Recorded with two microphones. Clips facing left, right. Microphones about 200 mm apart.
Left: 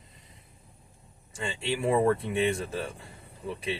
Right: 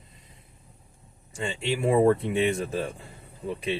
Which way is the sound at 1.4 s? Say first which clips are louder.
Right 3 dB; 30° right (ahead or behind).